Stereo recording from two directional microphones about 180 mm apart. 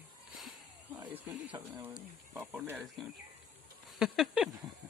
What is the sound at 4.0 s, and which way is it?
Speech, 5° right (ahead or behind).